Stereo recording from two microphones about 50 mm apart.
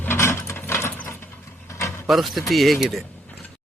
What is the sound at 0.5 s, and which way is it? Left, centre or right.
Mechanisms, left.